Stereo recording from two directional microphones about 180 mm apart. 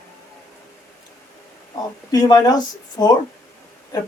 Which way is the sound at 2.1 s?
20° left (ahead or behind).